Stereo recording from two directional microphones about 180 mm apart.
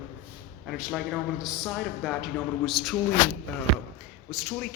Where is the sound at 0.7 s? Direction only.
5° right (ahead or behind).